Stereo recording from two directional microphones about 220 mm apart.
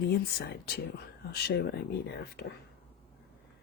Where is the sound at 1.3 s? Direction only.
50° left (ahead or behind).